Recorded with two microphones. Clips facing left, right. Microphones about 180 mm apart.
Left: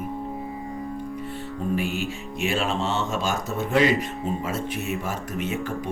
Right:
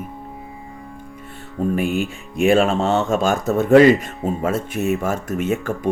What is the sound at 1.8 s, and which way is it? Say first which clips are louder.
Speech: right 6 dB; 50° right (ahead or behind).